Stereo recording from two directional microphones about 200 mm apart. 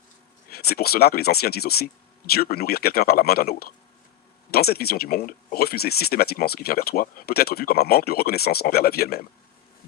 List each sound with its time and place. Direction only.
0.5 s speech: 50° left (ahead or behind)